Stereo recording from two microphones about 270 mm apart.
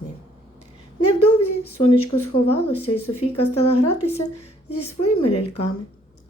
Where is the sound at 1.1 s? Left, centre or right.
Left.